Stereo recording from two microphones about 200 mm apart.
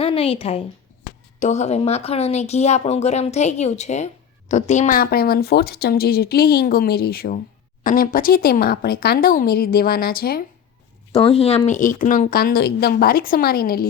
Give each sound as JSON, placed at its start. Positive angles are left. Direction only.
{"t": 0.0, "sound": "a woman's voice", "side_deg": 30}
{"t": 11.1, "sound": "speech", "side_deg": 30}